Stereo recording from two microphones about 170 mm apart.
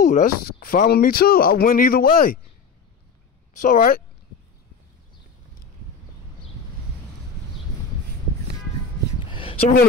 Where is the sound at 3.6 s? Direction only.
55° left (ahead or behind).